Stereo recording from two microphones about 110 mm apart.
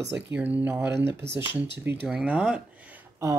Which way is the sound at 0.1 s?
15° right (ahead or behind).